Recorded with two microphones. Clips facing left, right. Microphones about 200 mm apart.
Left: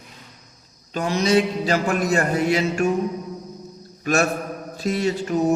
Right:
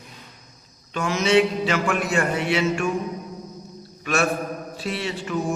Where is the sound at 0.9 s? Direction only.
35° left (ahead or behind).